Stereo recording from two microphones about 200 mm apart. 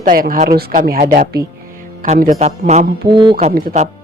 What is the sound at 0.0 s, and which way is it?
Speech, 45° right (ahead or behind).